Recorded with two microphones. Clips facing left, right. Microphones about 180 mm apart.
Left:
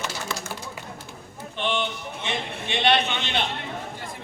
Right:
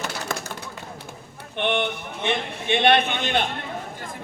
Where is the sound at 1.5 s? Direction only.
60° right (ahead or behind).